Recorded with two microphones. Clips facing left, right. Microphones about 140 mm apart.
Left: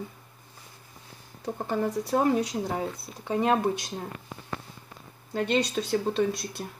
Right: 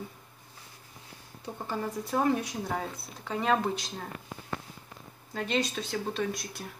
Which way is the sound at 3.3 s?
20° left (ahead or behind).